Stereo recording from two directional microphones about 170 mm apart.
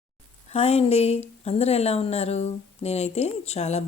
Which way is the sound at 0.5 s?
35° left (ahead or behind).